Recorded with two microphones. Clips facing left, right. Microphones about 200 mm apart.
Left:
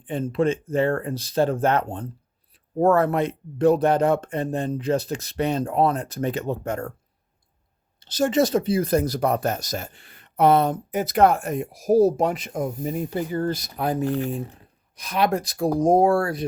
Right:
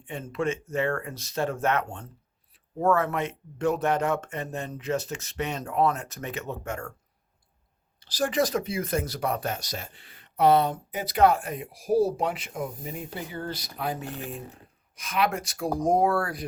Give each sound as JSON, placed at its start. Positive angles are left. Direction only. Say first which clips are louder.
{"t": 0.0, "sound": "speech", "louder": "left 7 dB", "side_deg": 30}
{"t": 7.9, "sound": "speech", "louder": "left 5 dB", "side_deg": 25}